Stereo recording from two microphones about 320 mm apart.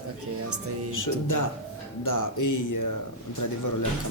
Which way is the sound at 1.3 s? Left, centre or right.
Left.